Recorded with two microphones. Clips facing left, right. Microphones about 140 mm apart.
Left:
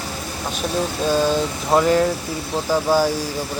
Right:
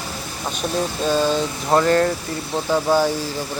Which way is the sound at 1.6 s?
5° left (ahead or behind).